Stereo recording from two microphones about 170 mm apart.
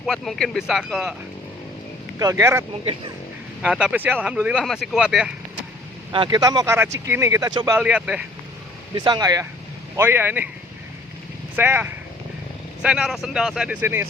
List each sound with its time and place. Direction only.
0.0 s speech: centre (ahead or behind)
2.1 s speech: 15° right (ahead or behind)
3.6 s speech: 5° right (ahead or behind)
6.1 s speech: 25° right (ahead or behind)
7.8 s speech: 5° right (ahead or behind)
9.0 s speech: 25° right (ahead or behind)
11.5 s speech: 10° right (ahead or behind)